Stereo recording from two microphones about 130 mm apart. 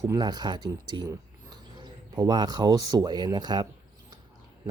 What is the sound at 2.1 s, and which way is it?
Speech, 30° right (ahead or behind).